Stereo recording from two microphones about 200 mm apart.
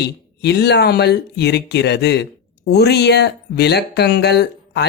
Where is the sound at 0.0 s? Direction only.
55° left (ahead or behind).